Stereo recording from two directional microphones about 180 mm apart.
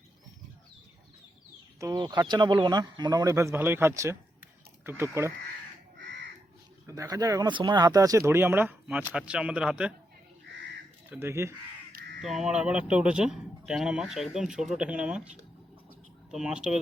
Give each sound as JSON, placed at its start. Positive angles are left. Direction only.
{"t": 1.8, "sound": "speech", "side_deg": -20}
{"t": 6.0, "sound": "crow", "side_deg": -85}
{"t": 6.8, "sound": "speech", "side_deg": -15}
{"t": 11.1, "sound": "speech", "side_deg": -15}
{"t": 11.9, "sound": "caw", "side_deg": -60}
{"t": 12.2, "sound": "speech", "side_deg": 0}